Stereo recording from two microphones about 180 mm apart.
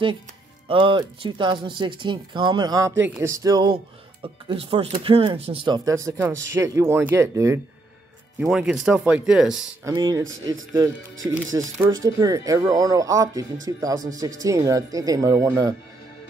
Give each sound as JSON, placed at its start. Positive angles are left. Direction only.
{"t": 0.7, "sound": "speech", "side_deg": -25}
{"t": 5.9, "sound": "speech", "side_deg": -15}
{"t": 8.4, "sound": "speech", "side_deg": -5}
{"t": 9.8, "sound": "speech", "side_deg": -20}